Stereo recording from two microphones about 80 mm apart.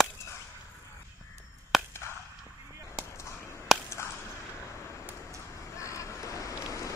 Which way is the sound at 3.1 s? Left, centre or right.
Left.